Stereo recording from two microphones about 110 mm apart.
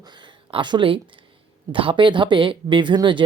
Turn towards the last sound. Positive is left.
turn(degrees=-45)  # may be behind; listen again after turning